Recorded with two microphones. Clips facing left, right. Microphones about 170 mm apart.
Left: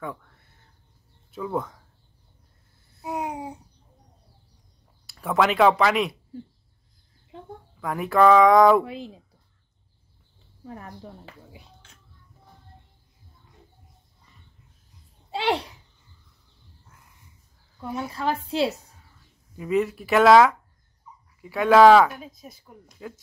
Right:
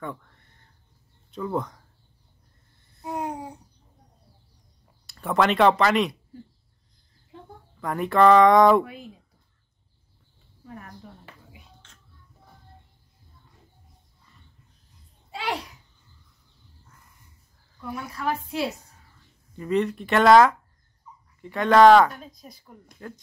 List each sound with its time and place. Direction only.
0.0 s speech: 5° left (ahead or behind)
2.9 s babbling: 5° left (ahead or behind)
5.0 s speech: centre (ahead or behind)
7.8 s speech: centre (ahead or behind)
8.8 s a woman's voice: 30° left (ahead or behind)
10.6 s speech: 30° left (ahead or behind)
15.3 s a sound: 30° left (ahead or behind)
17.7 s a woman's voice: 25° left (ahead or behind)
19.5 s speech: 5° left (ahead or behind)